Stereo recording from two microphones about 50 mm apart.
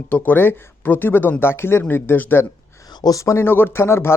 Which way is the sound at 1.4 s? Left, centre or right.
Left.